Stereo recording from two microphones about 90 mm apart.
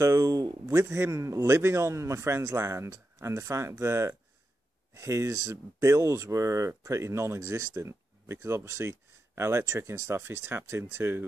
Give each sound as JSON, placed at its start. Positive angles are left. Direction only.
{"t": 0.0, "sound": "speech", "side_deg": -40}